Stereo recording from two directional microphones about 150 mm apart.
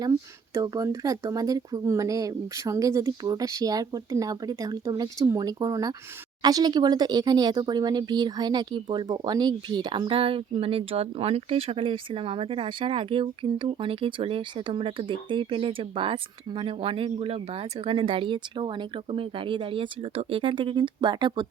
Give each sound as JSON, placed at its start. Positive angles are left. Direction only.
{"t": 0.0, "sound": "speech", "side_deg": -25}